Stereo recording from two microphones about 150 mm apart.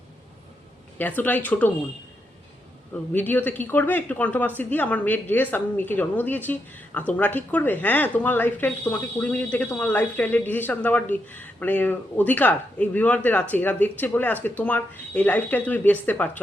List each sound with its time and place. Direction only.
0.9 s speech: 10° left (ahead or behind)
3.1 s speech: 10° left (ahead or behind)